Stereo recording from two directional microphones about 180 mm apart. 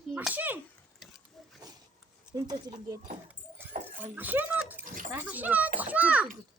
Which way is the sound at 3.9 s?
10° right (ahead or behind).